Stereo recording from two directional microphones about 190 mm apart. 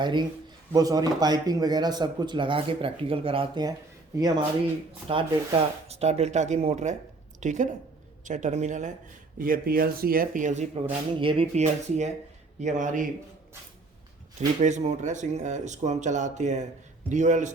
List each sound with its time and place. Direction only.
0.0 s speech: 25° right (ahead or behind)
5.1 s a woman's voice: 30° right (ahead or behind)
9.4 s speech: 50° right (ahead or behind)
14.3 s speech: 40° right (ahead or behind)